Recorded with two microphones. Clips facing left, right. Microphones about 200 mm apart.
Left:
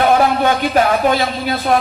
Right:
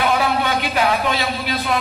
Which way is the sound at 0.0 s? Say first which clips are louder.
Left 6 dB; 50° left (ahead or behind).